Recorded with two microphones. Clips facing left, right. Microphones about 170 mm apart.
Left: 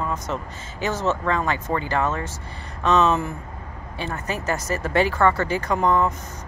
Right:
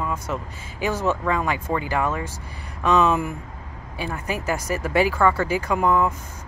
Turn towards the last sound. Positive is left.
turn(degrees=-10)  # may be behind; listen again after turning